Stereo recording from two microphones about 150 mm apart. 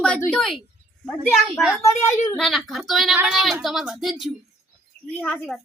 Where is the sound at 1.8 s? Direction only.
15° left (ahead or behind).